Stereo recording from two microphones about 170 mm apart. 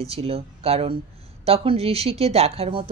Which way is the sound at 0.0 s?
35° right (ahead or behind).